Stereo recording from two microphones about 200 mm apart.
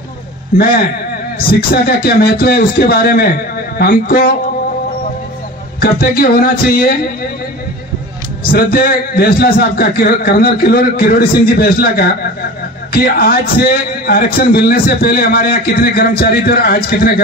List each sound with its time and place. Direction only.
1.7 s a man's voice: 50° left (ahead or behind)
5.8 s a man's voice: 50° left (ahead or behind)
8.5 s a man's voice: 50° left (ahead or behind)